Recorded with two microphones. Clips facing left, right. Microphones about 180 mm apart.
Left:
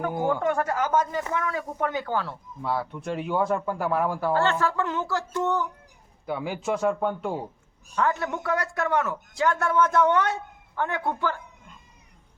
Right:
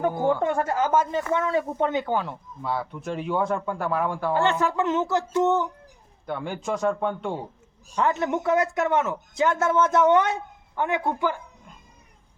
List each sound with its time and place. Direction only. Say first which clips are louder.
0.1 s speech: right 2 dB; 15° left (ahead or behind)
0.4 s a man's voice: right 1 dB; 25° right (ahead or behind)
2.6 s a man's voice: left 1 dB; centre (ahead or behind)
4.4 s a man's voice: right 3 dB; 15° right (ahead or behind)
6.2 s a man's voice: left 1 dB; 5° left (ahead or behind)
7.9 s a man's voice: right 2 dB; 20° right (ahead or behind)